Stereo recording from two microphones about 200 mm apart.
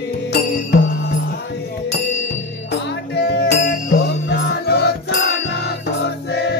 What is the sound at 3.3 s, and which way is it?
Music, 55° left (ahead or behind).